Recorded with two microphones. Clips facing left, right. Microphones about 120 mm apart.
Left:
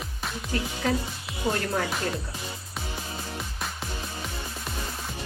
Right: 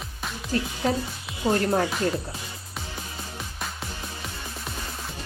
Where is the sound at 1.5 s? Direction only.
35° right (ahead or behind).